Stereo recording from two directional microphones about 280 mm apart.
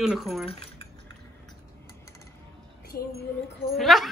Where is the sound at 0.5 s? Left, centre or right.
Centre.